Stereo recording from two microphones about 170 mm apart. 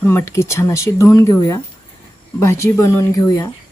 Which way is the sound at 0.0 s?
15° left (ahead or behind).